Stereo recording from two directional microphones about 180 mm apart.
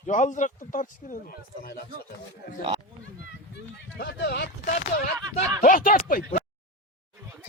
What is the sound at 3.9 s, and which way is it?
Speech, 65° left (ahead or behind).